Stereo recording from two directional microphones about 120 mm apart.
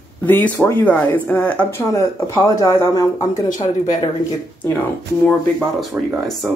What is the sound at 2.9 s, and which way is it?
Speech, 30° left (ahead or behind).